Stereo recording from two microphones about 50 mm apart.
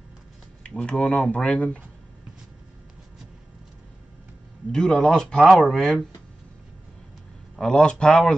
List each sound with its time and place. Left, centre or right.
0.7 s speech: left
4.7 s speech: centre
7.5 s speech: centre